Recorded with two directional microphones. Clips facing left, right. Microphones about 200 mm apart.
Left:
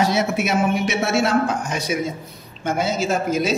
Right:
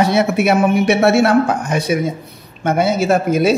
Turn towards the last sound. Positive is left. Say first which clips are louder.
# right 7 dB
turn(degrees=-60)  # may be behind; listen again after turning